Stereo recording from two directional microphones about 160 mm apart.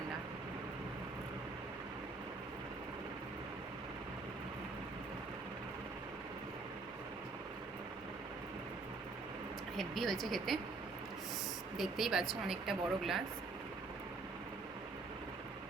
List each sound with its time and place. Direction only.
9.7 s speech: centre (ahead or behind)
11.8 s speech: centre (ahead or behind)